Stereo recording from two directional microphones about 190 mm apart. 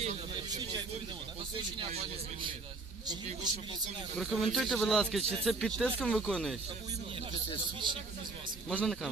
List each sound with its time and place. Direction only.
0.0 s a sound: 25° right (ahead or behind)
1.8 s a man's voice: 30° right (ahead or behind)
4.2 s speech: centre (ahead or behind)
7.8 s a man's voice: 25° right (ahead or behind)
8.6 s speech: centre (ahead or behind)